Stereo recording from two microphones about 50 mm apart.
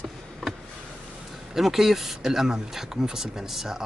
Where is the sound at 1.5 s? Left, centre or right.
Centre.